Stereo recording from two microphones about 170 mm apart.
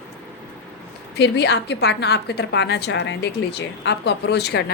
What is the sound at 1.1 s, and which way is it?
A woman's voice, 80° left.